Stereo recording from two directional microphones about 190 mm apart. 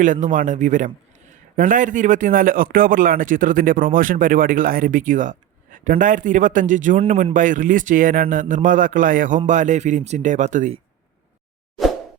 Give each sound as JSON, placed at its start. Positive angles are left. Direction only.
{"t": 0.0, "sound": "a man's voice", "side_deg": -45}